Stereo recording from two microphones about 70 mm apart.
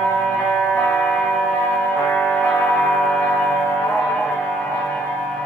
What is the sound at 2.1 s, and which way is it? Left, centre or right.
Music, centre.